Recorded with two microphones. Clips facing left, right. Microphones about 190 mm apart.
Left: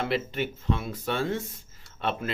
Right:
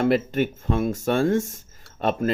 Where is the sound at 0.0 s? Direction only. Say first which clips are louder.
Right 8 dB; 45° right (ahead or behind).